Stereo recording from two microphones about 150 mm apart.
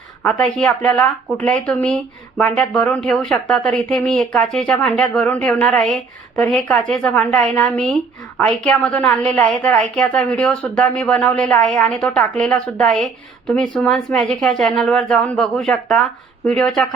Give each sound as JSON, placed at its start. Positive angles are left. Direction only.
{"t": 0.2, "sound": "a woman's voice", "side_deg": 5}